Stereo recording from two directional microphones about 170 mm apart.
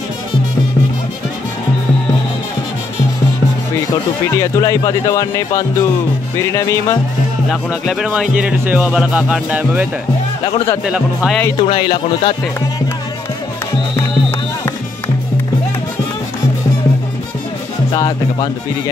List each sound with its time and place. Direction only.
4.3 s speech: 20° left (ahead or behind)
6.3 s music: 15° left (ahead or behind)
7.8 s speech: centre (ahead or behind)
11.6 s speech: 30° left (ahead or behind)
17.9 s speech: 20° left (ahead or behind)